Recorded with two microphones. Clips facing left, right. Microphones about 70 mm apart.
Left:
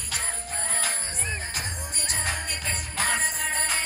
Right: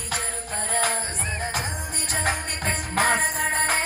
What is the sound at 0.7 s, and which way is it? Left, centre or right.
Music, right.